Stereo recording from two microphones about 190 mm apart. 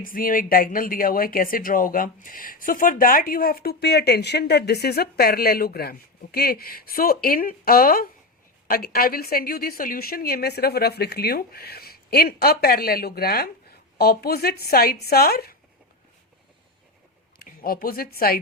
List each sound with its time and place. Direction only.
0.0 s speech: 45° left (ahead or behind)
17.4 s a woman's voice: 50° left (ahead or behind)